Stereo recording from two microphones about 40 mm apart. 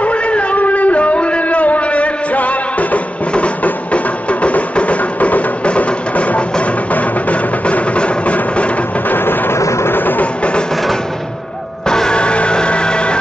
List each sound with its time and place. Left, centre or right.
0.0 s a sound: left
6.6 s music: left
9.1 s vehicle: left
11.9 s music: centre